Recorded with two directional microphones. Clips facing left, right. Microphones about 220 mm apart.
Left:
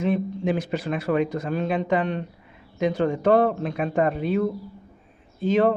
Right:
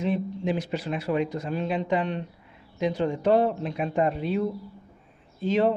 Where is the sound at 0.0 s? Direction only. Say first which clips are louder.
Left 3 dB; 50° left (ahead or behind).